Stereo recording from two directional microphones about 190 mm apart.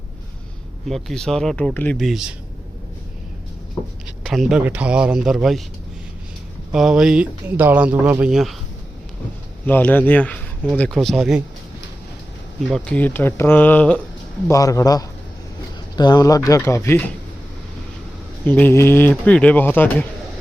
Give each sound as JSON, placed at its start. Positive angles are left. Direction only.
{"t": 0.9, "sound": "speech", "side_deg": 0}
{"t": 4.2, "sound": "speech", "side_deg": 0}
{"t": 6.7, "sound": "speech", "side_deg": 0}
{"t": 9.6, "sound": "speech", "side_deg": 10}
{"t": 12.7, "sound": "speech", "side_deg": 5}
{"t": 18.4, "sound": "speech", "side_deg": 10}